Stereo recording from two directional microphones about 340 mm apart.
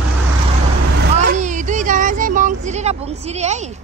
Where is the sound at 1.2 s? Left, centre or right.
Right.